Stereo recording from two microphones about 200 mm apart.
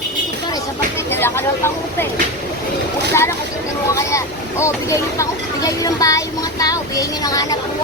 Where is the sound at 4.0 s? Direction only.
15° left (ahead or behind).